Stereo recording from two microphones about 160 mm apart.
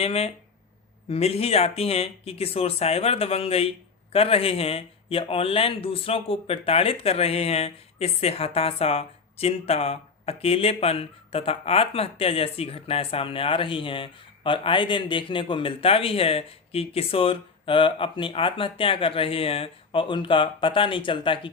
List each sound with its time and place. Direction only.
0.0 s speech: 40° left (ahead or behind)